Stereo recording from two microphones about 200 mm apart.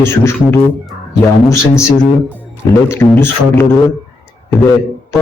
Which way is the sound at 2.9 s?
10° left (ahead or behind).